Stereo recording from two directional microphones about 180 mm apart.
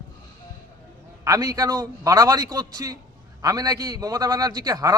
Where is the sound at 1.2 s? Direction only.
20° right (ahead or behind).